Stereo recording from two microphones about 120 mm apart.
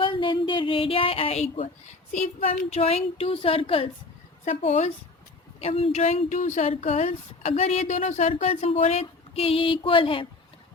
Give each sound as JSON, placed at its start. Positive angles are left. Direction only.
{"t": 0.0, "sound": "speech", "side_deg": 45}
{"t": 2.7, "sound": "a woman's voice", "side_deg": 60}
{"t": 4.4, "sound": "speech", "side_deg": 65}